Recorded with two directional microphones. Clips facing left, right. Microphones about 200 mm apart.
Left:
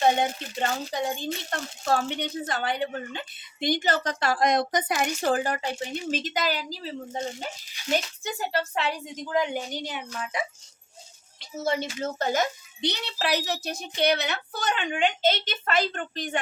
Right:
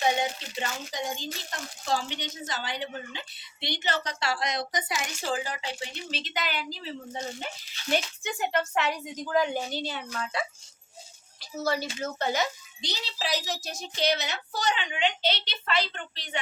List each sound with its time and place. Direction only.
0.0 s speech: 55° left (ahead or behind)
7.8 s speech: 15° left (ahead or behind)
8.2 s a woman's voice: 35° left (ahead or behind)
12.2 s a child's voice: 50° left (ahead or behind)